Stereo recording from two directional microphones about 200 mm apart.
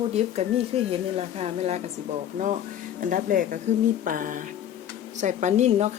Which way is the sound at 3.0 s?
40° right (ahead or behind).